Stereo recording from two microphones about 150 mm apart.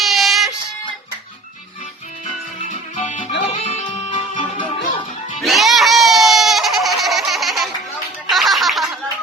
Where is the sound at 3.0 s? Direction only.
55° left (ahead or behind).